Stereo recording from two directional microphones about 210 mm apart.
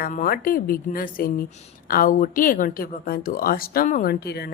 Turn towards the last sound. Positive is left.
turn(degrees=50)  # may be behind; listen again after turning